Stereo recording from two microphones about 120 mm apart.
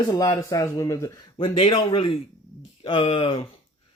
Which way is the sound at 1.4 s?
50° left (ahead or behind).